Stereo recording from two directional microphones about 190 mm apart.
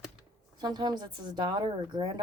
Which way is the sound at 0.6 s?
20° right (ahead or behind).